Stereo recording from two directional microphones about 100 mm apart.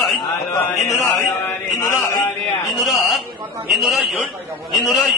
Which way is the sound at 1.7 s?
30° left (ahead or behind).